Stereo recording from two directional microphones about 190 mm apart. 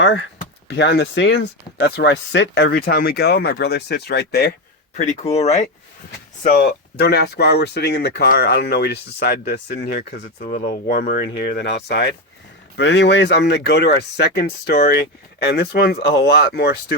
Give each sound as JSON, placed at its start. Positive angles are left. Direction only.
{"t": 0.0, "sound": "speech", "side_deg": 70}
{"t": 4.9, "sound": "speech", "side_deg": 35}
{"t": 6.1, "sound": "speech", "side_deg": 50}